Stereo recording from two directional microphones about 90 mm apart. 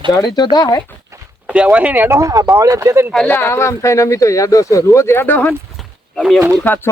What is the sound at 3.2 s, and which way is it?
Speech, 25° left (ahead or behind).